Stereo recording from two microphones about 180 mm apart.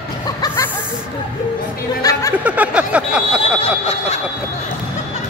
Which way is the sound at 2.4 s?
5° right (ahead or behind).